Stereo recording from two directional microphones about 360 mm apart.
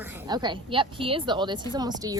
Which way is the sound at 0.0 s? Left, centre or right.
Centre.